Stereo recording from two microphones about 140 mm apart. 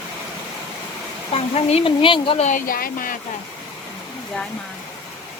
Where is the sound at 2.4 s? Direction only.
80° left.